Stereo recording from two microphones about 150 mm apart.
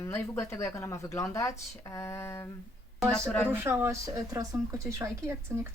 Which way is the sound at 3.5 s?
15° right (ahead or behind).